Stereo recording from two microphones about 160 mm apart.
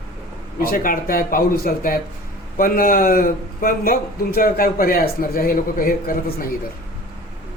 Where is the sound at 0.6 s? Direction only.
65° left (ahead or behind).